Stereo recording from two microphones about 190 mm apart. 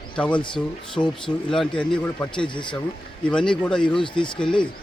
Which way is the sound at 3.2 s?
5° left (ahead or behind).